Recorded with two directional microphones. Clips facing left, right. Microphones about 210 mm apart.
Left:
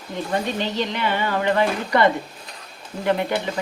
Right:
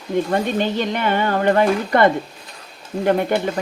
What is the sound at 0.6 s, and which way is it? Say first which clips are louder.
Speech: right 4 dB; 50° right (ahead or behind).